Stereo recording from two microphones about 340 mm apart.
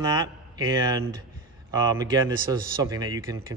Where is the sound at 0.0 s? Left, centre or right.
Centre.